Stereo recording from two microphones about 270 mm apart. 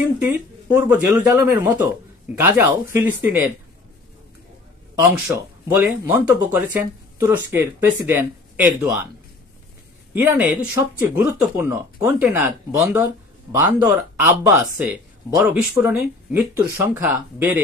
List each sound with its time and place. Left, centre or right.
0.2 s speech: centre
5.7 s speech: centre
10.1 s speech: centre